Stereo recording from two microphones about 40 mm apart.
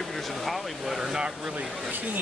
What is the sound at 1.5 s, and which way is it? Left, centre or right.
Speech, right.